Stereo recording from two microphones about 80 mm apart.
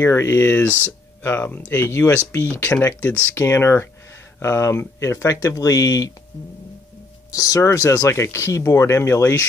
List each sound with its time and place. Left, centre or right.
0.0 s speech: left
7.3 s speech: left